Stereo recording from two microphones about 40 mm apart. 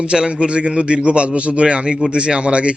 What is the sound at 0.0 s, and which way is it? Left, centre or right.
A man's voice, right.